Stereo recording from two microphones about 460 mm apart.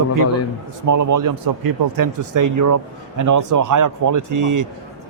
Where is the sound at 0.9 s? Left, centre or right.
Right.